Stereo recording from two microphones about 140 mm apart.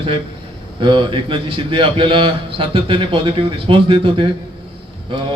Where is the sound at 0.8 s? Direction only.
35° right (ahead or behind).